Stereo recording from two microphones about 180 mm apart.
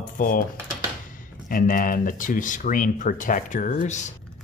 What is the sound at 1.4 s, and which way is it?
Speech, 50° left (ahead or behind).